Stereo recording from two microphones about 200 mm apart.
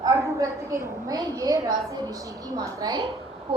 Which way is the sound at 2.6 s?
15° right (ahead or behind).